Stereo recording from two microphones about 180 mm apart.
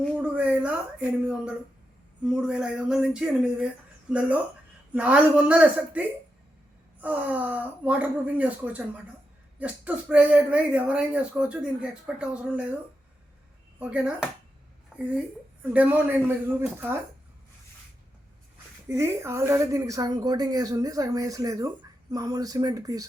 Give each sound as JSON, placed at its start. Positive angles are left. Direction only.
{"t": 0.1, "sound": "speech", "side_deg": -5}
{"t": 13.7, "sound": "speech", "side_deg": -5}
{"t": 14.9, "sound": "a sound", "side_deg": -5}
{"t": 15.6, "sound": "speech", "side_deg": -10}
{"t": 18.9, "sound": "a woman's voice", "side_deg": -15}